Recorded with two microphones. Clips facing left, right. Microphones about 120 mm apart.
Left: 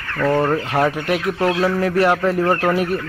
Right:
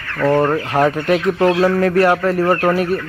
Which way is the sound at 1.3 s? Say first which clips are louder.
Right 4 dB; 25° right (ahead or behind).